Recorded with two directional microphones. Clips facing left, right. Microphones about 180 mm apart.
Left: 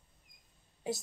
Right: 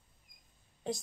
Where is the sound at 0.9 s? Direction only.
5° left (ahead or behind).